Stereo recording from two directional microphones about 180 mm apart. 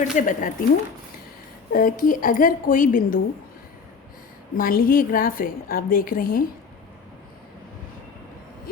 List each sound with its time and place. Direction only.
0.0 s a woman's voice: 45° left (ahead or behind)
1.7 s a woman's voice: 50° left (ahead or behind)
4.5 s a woman's voice: 50° left (ahead or behind)